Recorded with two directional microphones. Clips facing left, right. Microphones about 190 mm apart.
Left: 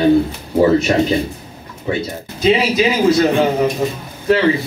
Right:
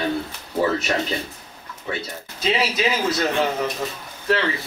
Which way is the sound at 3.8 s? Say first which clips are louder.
Left 9 dB; 15° left (ahead or behind).